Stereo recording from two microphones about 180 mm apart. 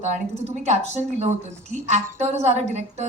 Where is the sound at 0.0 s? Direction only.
40° right (ahead or behind).